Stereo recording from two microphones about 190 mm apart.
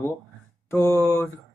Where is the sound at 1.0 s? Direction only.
10° left (ahead or behind).